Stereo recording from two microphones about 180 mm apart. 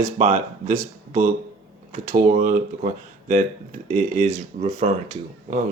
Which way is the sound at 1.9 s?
45° right (ahead or behind).